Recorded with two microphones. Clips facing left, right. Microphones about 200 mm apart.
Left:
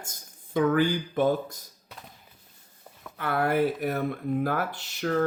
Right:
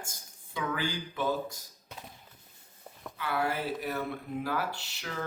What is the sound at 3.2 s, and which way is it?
Speech, 55° left (ahead or behind).